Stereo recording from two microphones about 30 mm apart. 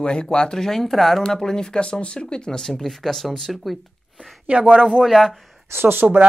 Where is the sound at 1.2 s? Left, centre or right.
Centre.